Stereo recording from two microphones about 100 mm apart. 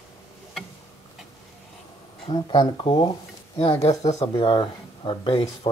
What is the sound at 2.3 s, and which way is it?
Speech, 45° left (ahead or behind).